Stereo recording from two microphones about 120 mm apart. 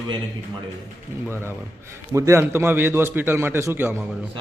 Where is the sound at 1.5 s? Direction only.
25° right (ahead or behind).